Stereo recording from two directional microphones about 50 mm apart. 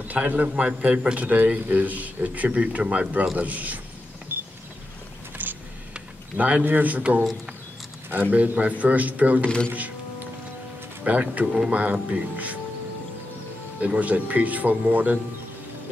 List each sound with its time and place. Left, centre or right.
0.1 s a man's voice: right
5.4 s a sound: right
6.6 s speech: right
11.1 s speech: right
11.4 s speech: centre
11.7 s speech: right
13.7 s speech: right